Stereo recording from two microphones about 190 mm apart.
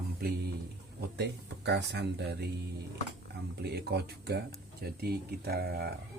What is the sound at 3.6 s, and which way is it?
Speech, 60° right (ahead or behind).